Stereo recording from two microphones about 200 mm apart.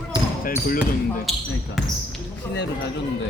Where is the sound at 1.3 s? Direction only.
Centre (ahead or behind).